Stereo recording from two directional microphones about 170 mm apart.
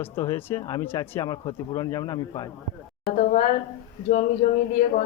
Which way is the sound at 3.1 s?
45° left (ahead or behind).